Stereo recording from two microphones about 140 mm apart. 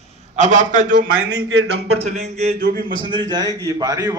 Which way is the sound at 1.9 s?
50° right (ahead or behind).